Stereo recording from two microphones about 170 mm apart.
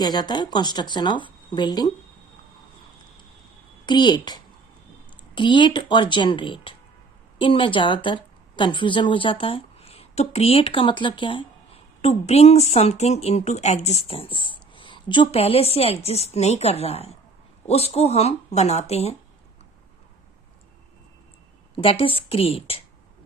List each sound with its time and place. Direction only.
0.0 s speech: 25° left (ahead or behind)
3.8 s a woman's voice: 25° left (ahead or behind)
21.8 s a woman's voice: 30° left (ahead or behind)